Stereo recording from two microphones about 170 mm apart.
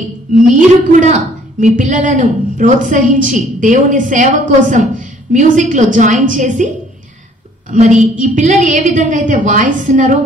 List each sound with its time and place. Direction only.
0.3 s a woman's voice: 45° right (ahead or behind)
7.7 s a woman's voice: 45° right (ahead or behind)